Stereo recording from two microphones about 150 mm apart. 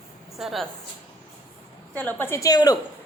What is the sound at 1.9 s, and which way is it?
Speech, 15° left (ahead or behind).